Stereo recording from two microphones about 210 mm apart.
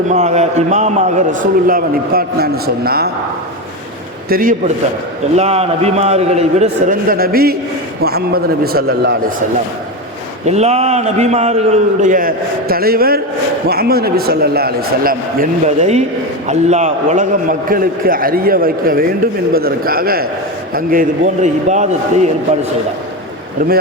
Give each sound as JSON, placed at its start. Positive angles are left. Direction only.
{"t": 0.1, "sound": "a man's voice", "side_deg": -30}
{"t": 4.3, "sound": "a man's voice", "side_deg": -40}
{"t": 5.3, "sound": "a man's voice", "side_deg": -30}
{"t": 10.4, "sound": "a man's voice", "side_deg": -30}